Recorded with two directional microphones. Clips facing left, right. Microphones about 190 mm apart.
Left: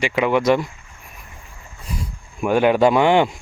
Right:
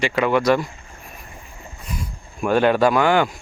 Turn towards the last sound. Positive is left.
turn(degrees=25)  # may be behind; listen again after turning